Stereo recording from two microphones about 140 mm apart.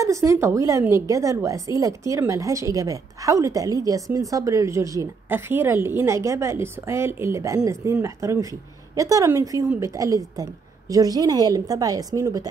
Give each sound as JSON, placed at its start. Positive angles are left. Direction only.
{"t": 0.0, "sound": "a woman's voice", "side_deg": -20}